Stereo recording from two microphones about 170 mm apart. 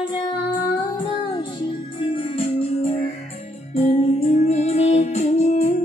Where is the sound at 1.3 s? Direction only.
30° left (ahead or behind).